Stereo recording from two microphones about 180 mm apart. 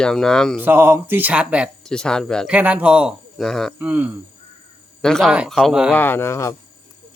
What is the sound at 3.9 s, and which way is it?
Speech, 10° right (ahead or behind).